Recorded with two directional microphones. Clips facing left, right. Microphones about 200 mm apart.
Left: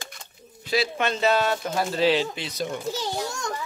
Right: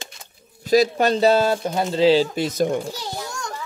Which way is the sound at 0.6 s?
40° right (ahead or behind).